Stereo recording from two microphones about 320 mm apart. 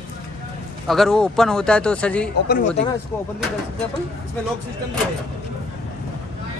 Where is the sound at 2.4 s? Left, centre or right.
Left.